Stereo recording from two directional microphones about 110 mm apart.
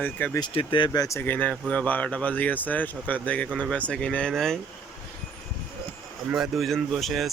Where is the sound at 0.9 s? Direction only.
30° left (ahead or behind); by 4.5 s 5° left (ahead or behind).